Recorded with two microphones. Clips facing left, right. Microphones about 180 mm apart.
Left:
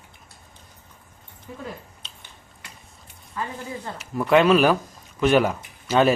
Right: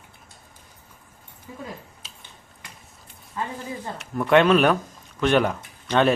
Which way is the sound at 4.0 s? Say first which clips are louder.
Even; centre (ahead or behind).